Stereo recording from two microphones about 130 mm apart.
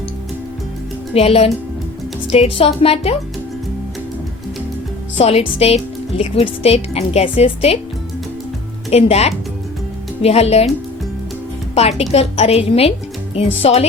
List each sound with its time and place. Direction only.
1.1 s speech: 50° left (ahead or behind)
5.1 s speech: 50° left (ahead or behind)
8.9 s speech: 55° left (ahead or behind)
11.7 s speech: 55° left (ahead or behind)